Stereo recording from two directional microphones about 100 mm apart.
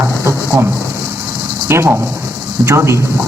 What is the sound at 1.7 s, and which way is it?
Speech, 25° right (ahead or behind).